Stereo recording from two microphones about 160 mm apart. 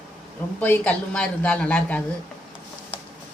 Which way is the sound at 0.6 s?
10° left (ahead or behind).